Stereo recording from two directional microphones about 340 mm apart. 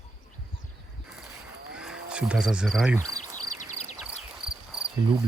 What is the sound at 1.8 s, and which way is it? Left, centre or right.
Cricket, centre.